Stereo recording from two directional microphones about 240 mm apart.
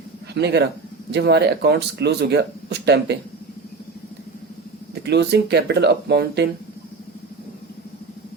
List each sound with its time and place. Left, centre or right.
0.3 s speech: right
5.0 s speech: right